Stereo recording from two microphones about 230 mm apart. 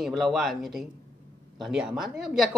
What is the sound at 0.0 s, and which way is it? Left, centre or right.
Speech, centre.